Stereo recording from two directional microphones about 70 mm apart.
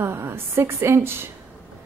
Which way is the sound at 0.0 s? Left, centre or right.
Right.